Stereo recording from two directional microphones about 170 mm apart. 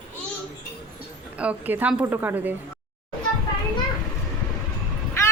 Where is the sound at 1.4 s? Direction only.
10° right (ahead or behind).